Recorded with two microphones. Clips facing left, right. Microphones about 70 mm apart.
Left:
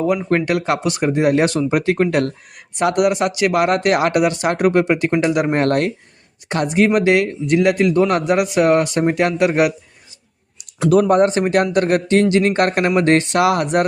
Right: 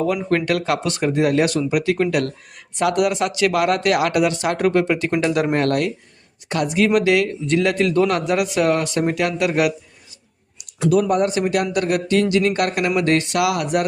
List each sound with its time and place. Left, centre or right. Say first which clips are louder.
0.0 s a man's voice: left 2 dB; left
5.5 s a man's voice: left 2 dB; left
11.1 s speech: left 4 dB; left